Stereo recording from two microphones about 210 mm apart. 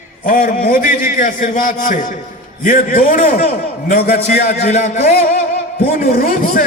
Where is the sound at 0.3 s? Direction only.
40° left (ahead or behind).